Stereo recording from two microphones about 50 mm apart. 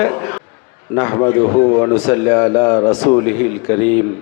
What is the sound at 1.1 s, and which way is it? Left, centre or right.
Speech, left.